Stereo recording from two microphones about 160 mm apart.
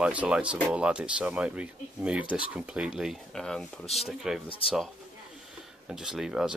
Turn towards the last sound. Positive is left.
turn(degrees=-5)  # may be behind; listen again after turning